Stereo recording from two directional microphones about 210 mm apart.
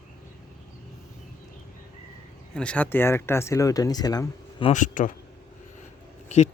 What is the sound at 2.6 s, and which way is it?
Speech, 5° left (ahead or behind).